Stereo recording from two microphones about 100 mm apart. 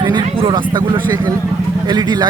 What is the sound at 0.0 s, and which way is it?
Speech, 50° right (ahead or behind).